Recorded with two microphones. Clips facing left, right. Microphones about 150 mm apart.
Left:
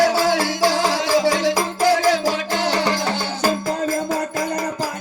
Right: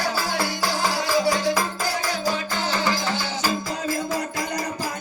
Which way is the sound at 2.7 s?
75° left (ahead or behind).